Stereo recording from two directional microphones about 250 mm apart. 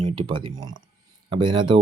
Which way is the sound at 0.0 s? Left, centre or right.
Right.